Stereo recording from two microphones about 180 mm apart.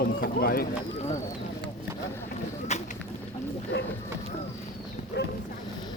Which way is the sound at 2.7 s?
40° left (ahead or behind).